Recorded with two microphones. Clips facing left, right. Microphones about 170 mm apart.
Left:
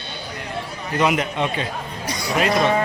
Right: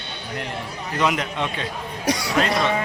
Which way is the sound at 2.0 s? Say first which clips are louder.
Right 4 dB; 75° right (ahead or behind).